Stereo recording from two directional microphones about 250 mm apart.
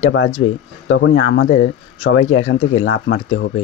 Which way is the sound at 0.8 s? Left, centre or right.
Left.